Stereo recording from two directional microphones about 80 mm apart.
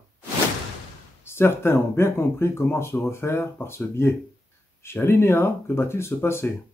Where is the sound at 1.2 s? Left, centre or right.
Left.